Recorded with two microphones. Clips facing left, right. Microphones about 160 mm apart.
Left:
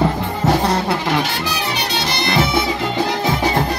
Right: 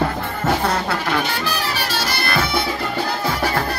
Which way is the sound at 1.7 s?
20° left (ahead or behind).